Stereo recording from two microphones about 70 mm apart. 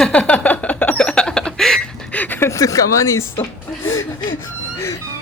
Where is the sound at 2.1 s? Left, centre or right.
Left.